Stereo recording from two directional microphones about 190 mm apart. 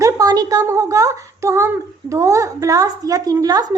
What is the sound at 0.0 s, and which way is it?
Speech, 20° right (ahead or behind).